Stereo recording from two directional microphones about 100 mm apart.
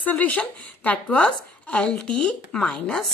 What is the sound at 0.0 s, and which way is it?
A woman's voice, 15° left (ahead or behind).